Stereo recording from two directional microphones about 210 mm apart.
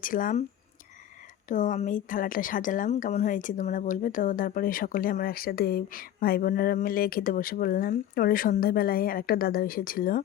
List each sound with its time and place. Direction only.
0.0 s speech: 40° left (ahead or behind)
1.5 s speech: 35° left (ahead or behind)